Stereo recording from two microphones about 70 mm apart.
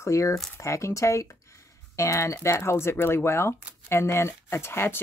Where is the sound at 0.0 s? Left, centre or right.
Left.